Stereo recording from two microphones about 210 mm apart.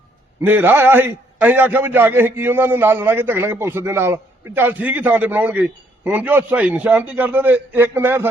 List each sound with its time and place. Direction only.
0.4 s a man's voice: 10° right (ahead or behind)